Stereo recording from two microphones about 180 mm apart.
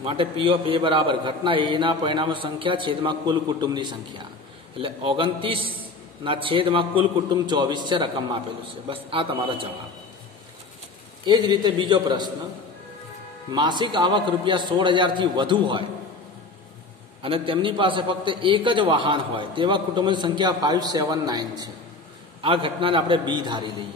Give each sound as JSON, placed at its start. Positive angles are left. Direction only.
{"t": 0.0, "sound": "a man's voice", "side_deg": -30}
{"t": 11.2, "sound": "a man's voice", "side_deg": -25}
{"t": 13.5, "sound": "a man's voice", "side_deg": -25}
{"t": 17.2, "sound": "a man's voice", "side_deg": -30}